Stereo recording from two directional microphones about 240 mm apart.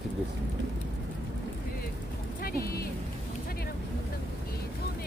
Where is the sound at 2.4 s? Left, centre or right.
Left.